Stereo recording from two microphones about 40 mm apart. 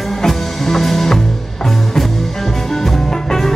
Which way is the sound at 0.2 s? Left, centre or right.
Centre.